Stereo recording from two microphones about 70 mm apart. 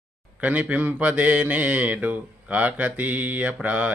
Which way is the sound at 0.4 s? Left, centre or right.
Right.